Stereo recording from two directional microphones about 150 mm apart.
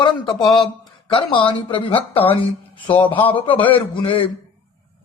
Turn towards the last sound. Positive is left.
turn(degrees=35)  # may be behind; listen again after turning